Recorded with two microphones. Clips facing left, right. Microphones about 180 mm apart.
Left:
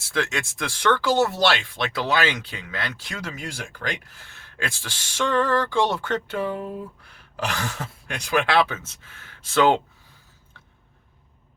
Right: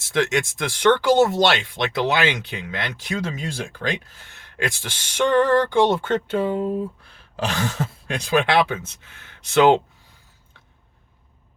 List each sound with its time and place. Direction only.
0.1 s speech: 20° right (ahead or behind)